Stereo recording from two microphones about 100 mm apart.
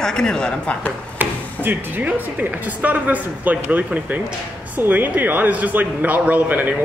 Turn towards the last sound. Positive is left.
turn(degrees=-15)  # may be behind; listen again after turning